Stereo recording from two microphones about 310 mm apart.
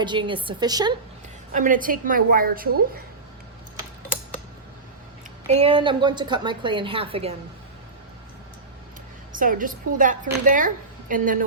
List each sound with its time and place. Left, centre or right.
0.0 s a woman's voice: centre
1.5 s a woman's voice: right
5.5 s a woman's voice: centre
9.4 s a woman's voice: right